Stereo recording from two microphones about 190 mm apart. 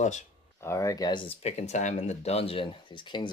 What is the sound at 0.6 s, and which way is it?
Speech, 15° left (ahead or behind).